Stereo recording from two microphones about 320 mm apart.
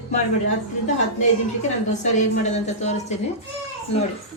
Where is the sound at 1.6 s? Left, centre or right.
Left.